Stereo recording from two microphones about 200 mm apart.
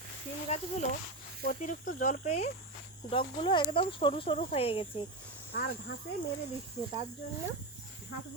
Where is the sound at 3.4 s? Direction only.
25° left (ahead or behind).